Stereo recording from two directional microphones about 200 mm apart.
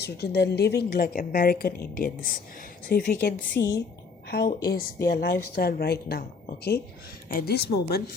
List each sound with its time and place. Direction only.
0.0 s a woman's voice: 55° left (ahead or behind)
3.6 s a woman's voice: 20° left (ahead or behind)
4.3 s a woman's voice: 55° left (ahead or behind)